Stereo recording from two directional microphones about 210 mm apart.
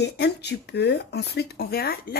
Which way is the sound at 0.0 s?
55° left (ahead or behind).